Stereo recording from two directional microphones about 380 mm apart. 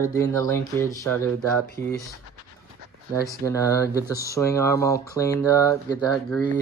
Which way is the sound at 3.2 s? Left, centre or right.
Centre.